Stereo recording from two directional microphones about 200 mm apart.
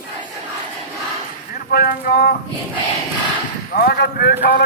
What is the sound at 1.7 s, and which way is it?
Speech, 50° left (ahead or behind).